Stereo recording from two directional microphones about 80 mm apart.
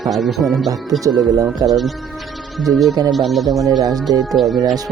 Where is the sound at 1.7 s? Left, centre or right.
Centre.